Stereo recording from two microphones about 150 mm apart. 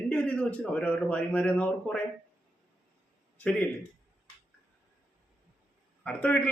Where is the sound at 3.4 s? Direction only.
10° left (ahead or behind).